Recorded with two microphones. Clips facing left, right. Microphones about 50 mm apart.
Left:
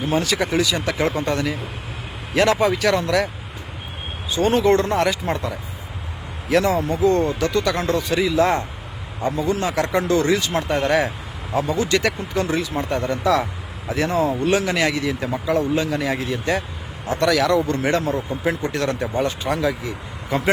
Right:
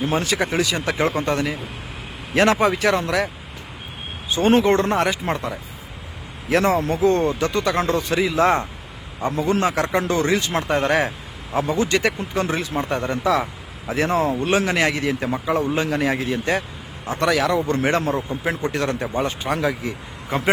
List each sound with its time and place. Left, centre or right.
0.1 s speech: right
4.3 s speech: right